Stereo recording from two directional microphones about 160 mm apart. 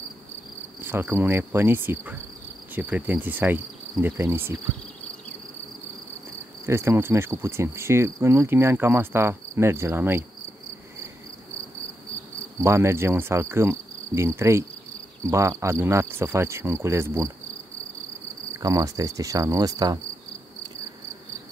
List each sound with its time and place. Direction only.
0.7 s insect: 15° right (ahead or behind)
6.6 s insect: 15° right (ahead or behind)
12.6 s insect: 15° right (ahead or behind)
18.5 s insect: 20° right (ahead or behind)